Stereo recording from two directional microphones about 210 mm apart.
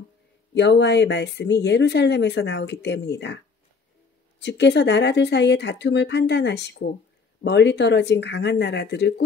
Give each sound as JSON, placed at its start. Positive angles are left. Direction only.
{"t": 0.6, "sound": "speech", "side_deg": 55}
{"t": 4.4, "sound": "speech", "side_deg": 55}